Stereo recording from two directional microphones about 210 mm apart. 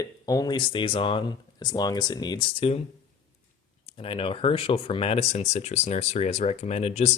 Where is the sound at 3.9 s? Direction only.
25° left (ahead or behind).